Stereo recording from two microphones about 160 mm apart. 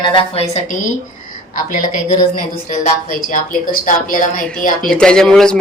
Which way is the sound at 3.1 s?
55° left (ahead or behind).